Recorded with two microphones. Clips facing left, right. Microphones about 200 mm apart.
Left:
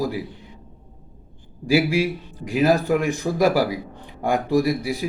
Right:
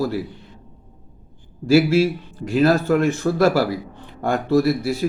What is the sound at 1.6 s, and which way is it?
A man's voice, 15° left (ahead or behind).